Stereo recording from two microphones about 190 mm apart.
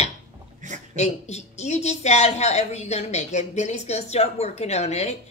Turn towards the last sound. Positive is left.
turn(degrees=35)  # may be behind; listen again after turning